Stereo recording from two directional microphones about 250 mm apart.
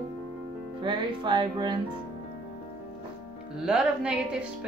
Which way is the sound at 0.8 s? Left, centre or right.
Centre.